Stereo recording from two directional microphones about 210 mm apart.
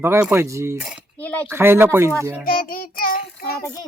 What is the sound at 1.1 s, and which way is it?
Speech, 5° left (ahead or behind).